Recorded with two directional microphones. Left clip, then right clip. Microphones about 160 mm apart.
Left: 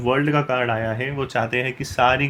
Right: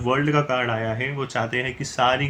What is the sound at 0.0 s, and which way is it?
Speech, 35° left (ahead or behind).